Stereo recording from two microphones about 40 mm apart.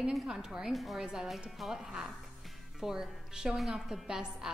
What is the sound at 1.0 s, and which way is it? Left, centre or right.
A woman's voice, centre.